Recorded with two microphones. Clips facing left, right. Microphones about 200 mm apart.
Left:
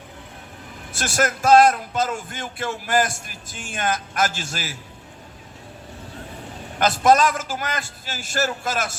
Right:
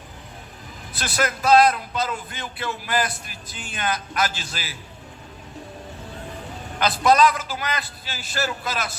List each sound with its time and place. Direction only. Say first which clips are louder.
0.9 s speech: left 2 dB; 45° left (ahead or behind)
6.7 s speech: left 1 dB; 45° left (ahead or behind)